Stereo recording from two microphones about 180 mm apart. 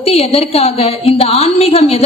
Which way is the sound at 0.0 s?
35° left (ahead or behind).